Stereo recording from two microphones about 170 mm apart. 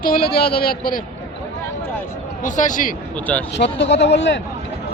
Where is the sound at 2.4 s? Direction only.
50° left (ahead or behind).